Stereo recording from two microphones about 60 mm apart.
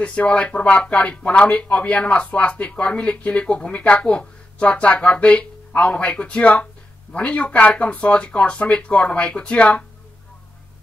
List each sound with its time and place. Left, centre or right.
0.0 s speech: centre